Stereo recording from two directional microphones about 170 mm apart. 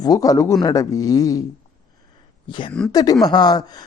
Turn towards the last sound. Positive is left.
turn(degrees=25)  # may be behind; listen again after turning